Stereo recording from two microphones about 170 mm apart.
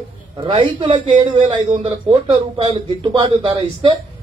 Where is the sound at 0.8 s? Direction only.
35° right (ahead or behind).